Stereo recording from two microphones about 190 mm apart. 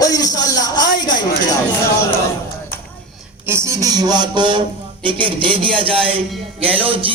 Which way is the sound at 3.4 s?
15° right (ahead or behind).